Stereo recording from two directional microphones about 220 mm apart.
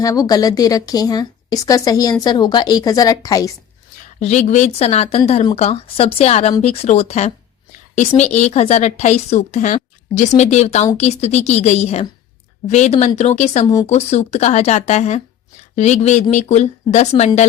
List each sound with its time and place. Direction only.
0.0 s a woman's voice: 15° left (ahead or behind)
4.2 s a woman's voice: 30° left (ahead or behind)